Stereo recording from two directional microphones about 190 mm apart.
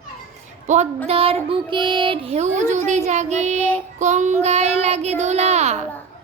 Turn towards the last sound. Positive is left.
turn(degrees=-35)  # may be behind; listen again after turning